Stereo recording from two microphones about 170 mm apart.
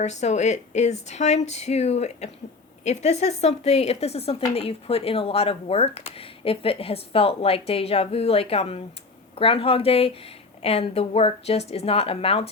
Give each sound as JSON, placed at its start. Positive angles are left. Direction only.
{"t": 0.0, "sound": "speech", "side_deg": 40}